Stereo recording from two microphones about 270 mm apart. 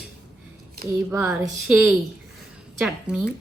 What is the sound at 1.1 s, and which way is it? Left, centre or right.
A woman's voice, centre.